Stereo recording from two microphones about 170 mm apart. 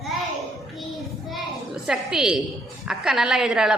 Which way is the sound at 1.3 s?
Centre (ahead or behind).